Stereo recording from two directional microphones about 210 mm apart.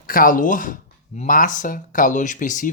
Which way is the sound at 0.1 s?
40° left (ahead or behind).